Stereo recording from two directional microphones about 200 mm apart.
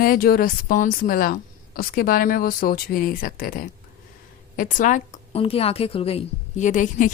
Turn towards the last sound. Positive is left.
turn(degrees=40)  # may be behind; listen again after turning